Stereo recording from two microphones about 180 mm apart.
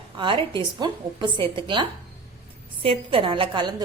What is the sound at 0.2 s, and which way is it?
A woman's voice, 25° right (ahead or behind).